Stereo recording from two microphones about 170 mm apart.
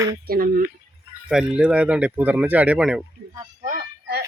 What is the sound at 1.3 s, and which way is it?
Speech, 5° right (ahead or behind).